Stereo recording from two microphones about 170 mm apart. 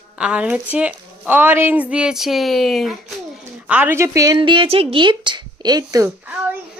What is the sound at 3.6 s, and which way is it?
A woman's voice, 10° right (ahead or behind).